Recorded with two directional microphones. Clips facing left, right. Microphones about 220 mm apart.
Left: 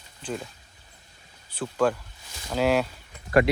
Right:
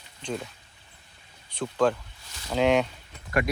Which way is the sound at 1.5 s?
5° left (ahead or behind).